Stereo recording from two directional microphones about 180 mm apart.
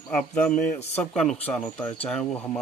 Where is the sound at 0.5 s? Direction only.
50° left (ahead or behind).